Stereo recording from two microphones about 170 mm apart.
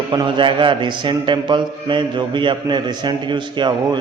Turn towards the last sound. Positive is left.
turn(degrees=-25)  # may be behind; listen again after turning